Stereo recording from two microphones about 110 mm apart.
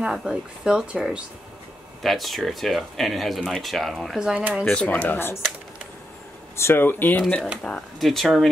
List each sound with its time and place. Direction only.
0.0 s speech: 5° right (ahead or behind)
4.6 s speech: 10° left (ahead or behind)
6.5 s speech: 20° left (ahead or behind); by 8.5 s centre (ahead or behind)